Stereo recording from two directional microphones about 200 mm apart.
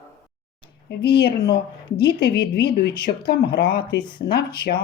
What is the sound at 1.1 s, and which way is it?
Speech, 55° left (ahead or behind).